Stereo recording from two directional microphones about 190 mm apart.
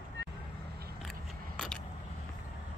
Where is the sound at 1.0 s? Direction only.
Centre (ahead or behind).